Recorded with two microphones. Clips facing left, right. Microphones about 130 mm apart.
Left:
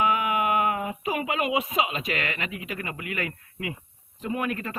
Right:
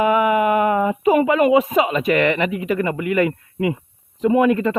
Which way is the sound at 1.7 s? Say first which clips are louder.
Right 10 dB; 50° right (ahead or behind).